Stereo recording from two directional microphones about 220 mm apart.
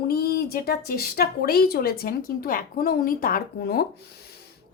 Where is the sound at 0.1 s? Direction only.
45° left (ahead or behind).